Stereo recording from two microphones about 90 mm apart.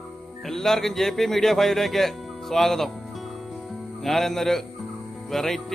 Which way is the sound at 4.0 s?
5° left (ahead or behind).